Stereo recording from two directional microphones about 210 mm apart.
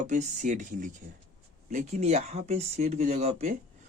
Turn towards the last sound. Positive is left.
turn(degrees=-30)  # may be behind; listen again after turning